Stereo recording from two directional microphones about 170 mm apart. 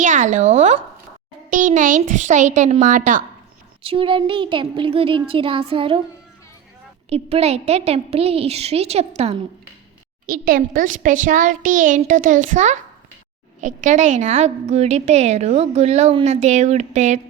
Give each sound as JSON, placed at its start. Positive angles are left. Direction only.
{"t": 0.0, "sound": "a child's voice", "side_deg": -45}
{"t": 3.8, "sound": "a woman's voice", "side_deg": -30}
{"t": 7.1, "sound": "a woman's voice", "side_deg": -35}
{"t": 10.2, "sound": "a child's voice", "side_deg": -55}